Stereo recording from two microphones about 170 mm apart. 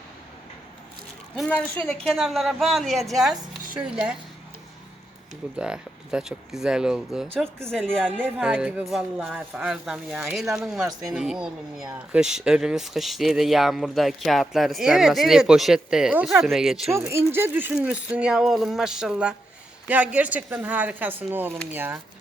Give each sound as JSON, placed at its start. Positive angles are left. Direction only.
{"t": 1.4, "sound": "speech", "side_deg": 10}
{"t": 5.5, "sound": "speech", "side_deg": -5}
{"t": 8.2, "sound": "speech", "side_deg": -5}
{"t": 16.9, "sound": "speech", "side_deg": -15}